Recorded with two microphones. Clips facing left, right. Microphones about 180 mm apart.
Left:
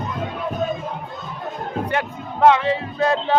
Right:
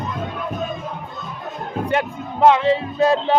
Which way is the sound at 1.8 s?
20° right (ahead or behind).